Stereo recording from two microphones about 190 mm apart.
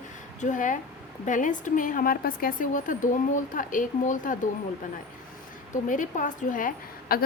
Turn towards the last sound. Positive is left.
turn(degrees=50)  # may be behind; listen again after turning